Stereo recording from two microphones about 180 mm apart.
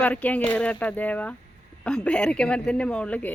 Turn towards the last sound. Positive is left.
turn(degrees=5)  # may be behind; listen again after turning